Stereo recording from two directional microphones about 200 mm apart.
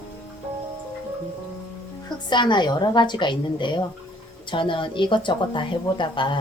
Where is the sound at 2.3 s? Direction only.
20° left (ahead or behind).